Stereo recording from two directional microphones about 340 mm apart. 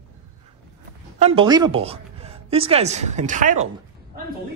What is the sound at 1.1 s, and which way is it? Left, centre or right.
Speech, centre.